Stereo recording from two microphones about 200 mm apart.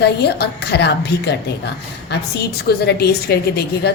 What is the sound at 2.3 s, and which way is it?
A woman's voice, 55° left (ahead or behind).